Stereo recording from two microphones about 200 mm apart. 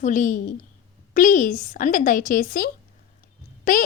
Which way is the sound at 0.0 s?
40° left (ahead or behind).